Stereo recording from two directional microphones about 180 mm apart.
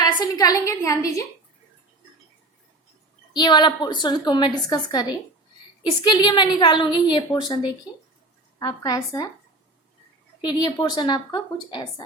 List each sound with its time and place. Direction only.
0.0 s a woman's voice: 20° left (ahead or behind)
3.3 s a woman's voice: 25° left (ahead or behind)
10.4 s a woman's voice: 25° left (ahead or behind)